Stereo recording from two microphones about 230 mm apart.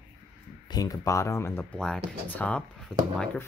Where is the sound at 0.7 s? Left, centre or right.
Centre.